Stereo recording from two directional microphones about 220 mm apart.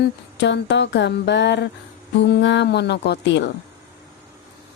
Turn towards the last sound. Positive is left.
turn(degrees=50)  # may be behind; listen again after turning